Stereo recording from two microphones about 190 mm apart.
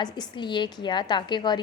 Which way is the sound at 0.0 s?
25° left (ahead or behind).